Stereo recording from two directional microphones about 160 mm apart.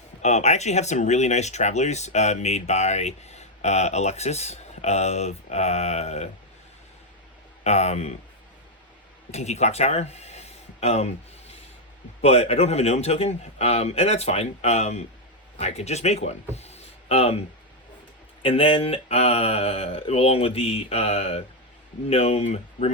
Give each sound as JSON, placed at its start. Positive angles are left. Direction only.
{"t": 0.2, "sound": "speech", "side_deg": 45}
{"t": 7.6, "sound": "speech", "side_deg": 45}
{"t": 9.3, "sound": "speech", "side_deg": 45}
{"t": 16.6, "sound": "a sound", "side_deg": 40}
{"t": 18.4, "sound": "speech", "side_deg": 35}